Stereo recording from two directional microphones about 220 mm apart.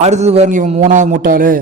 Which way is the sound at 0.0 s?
30° right (ahead or behind).